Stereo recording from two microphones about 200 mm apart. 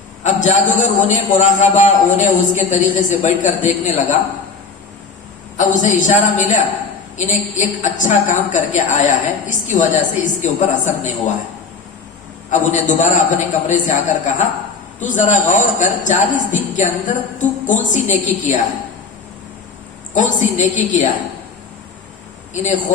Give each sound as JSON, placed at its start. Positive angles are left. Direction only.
{"t": 0.2, "sound": "a man's voice", "side_deg": 40}
{"t": 5.5, "sound": "a man's voice", "side_deg": 40}
{"t": 12.5, "sound": "a man's voice", "side_deg": 40}
{"t": 20.1, "sound": "a man's voice", "side_deg": 40}